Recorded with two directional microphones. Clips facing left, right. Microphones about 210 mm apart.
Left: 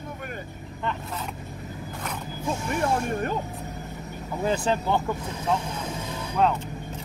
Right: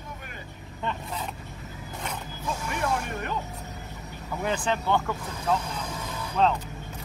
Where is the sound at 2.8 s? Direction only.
40° left (ahead or behind).